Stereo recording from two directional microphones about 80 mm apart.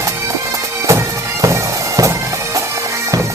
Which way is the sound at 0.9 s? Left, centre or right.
Right.